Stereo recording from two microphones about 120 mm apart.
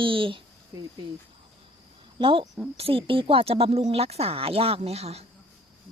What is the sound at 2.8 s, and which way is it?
A woman's voice, 50° right (ahead or behind).